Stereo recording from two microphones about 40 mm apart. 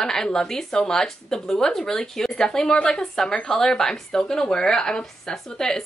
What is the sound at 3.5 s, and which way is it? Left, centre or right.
Speech, centre.